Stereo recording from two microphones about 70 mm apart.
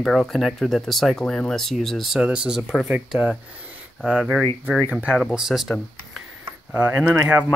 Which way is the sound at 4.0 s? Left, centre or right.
Centre.